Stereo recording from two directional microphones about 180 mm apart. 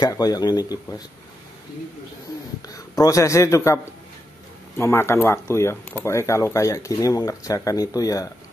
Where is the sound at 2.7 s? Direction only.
20° left (ahead or behind).